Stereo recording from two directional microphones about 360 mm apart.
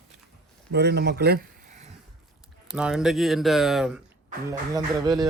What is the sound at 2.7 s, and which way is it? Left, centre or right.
A man's voice, centre.